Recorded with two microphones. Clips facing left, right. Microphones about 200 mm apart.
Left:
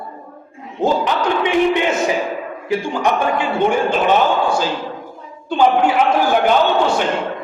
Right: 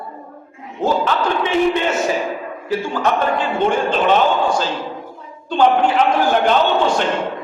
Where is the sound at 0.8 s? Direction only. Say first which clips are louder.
Left 1 dB; 15° left (ahead or behind).